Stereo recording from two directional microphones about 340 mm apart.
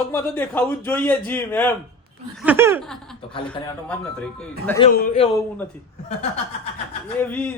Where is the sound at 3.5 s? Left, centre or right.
Centre.